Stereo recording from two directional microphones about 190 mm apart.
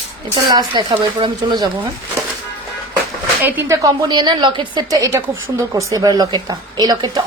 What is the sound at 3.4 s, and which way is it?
A woman's voice, 10° right (ahead or behind).